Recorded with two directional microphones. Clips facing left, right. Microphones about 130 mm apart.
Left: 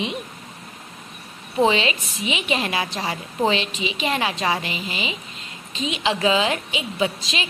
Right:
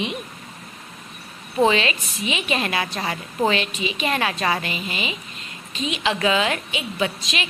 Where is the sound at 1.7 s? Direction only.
25° left (ahead or behind).